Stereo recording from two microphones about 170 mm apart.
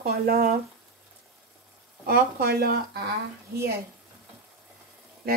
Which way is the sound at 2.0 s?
65° right (ahead or behind).